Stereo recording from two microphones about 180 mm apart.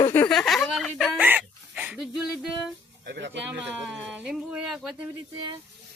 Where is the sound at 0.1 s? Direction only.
10° left (ahead or behind).